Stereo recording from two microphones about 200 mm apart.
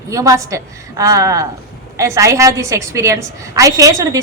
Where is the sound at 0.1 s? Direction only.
15° right (ahead or behind).